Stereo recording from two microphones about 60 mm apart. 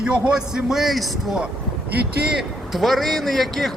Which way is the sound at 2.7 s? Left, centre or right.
Centre.